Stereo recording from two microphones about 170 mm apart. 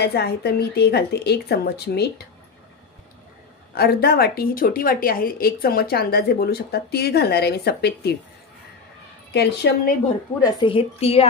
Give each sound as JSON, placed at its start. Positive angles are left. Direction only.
{"t": 0.0, "sound": "speech", "side_deg": 70}
{"t": 3.7, "sound": "speech", "side_deg": 65}
{"t": 9.3, "sound": "speech", "side_deg": 80}
{"t": 10.4, "sound": "a woman's voice", "side_deg": 30}